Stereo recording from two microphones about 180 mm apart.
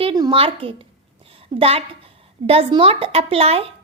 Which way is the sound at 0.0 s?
25° right (ahead or behind).